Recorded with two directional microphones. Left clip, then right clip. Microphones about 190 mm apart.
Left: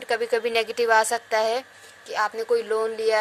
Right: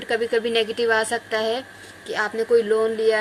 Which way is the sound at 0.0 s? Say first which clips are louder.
Right 2 dB; 40° left (ahead or behind).